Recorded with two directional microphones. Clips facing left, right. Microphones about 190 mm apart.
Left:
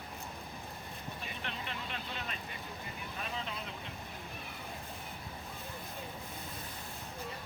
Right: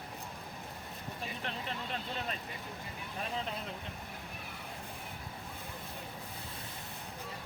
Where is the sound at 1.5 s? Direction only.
40° right (ahead or behind).